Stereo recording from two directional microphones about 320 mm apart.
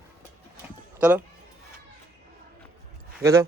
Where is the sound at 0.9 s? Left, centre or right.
Centre.